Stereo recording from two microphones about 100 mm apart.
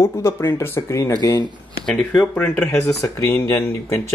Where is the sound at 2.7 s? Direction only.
30° left (ahead or behind).